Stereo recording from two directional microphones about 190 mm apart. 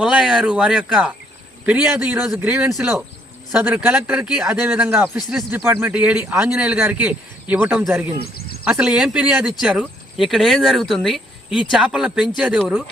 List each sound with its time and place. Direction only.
0.0 s speech: 5° right (ahead or behind)
8.2 s a sound: 55° left (ahead or behind)
8.6 s speech: 5° right (ahead or behind)